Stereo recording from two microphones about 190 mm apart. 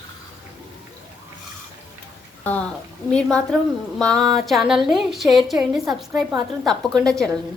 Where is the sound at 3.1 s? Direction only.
5° left (ahead or behind).